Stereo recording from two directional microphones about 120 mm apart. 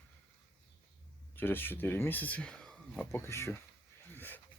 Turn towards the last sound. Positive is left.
turn(degrees=15)  # may be behind; listen again after turning